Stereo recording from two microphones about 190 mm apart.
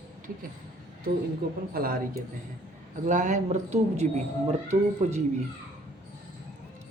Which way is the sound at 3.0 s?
40° right (ahead or behind).